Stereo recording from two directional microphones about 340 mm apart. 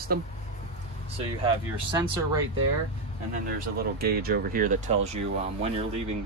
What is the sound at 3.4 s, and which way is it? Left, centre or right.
Speech, right.